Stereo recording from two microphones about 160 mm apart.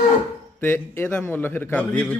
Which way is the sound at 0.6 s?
15° left (ahead or behind).